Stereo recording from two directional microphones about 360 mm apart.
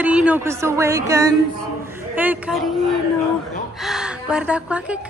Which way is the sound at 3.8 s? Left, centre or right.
Centre.